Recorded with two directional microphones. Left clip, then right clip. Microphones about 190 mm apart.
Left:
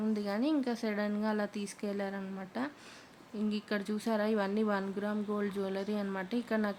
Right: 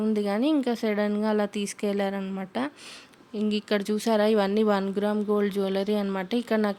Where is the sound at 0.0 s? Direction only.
40° right (ahead or behind).